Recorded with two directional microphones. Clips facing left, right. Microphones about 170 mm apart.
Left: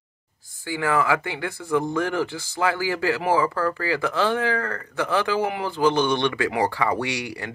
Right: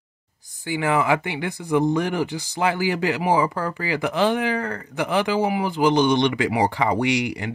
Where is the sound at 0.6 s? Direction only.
20° right (ahead or behind).